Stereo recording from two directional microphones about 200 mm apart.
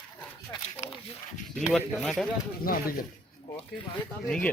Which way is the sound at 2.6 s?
45° left (ahead or behind).